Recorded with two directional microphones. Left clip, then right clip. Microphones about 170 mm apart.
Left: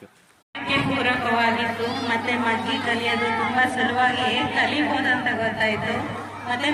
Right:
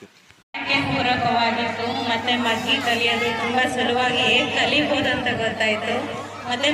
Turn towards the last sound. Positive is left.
turn(degrees=-80)